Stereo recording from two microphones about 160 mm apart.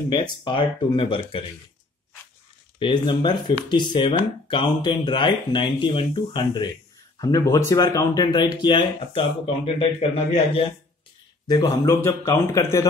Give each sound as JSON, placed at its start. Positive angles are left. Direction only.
{"t": 0.1, "sound": "speech", "side_deg": 25}
{"t": 2.8, "sound": "speech", "side_deg": 30}
{"t": 11.4, "sound": "speech", "side_deg": 25}